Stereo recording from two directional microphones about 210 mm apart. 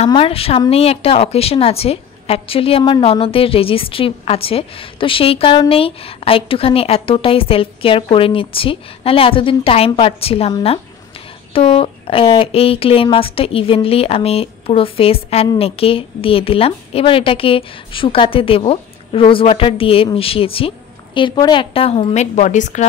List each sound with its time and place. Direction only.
0.0 s speech: 25° left (ahead or behind)